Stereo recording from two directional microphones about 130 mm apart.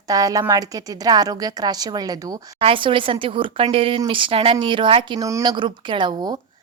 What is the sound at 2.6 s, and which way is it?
Speech, 45° right (ahead or behind).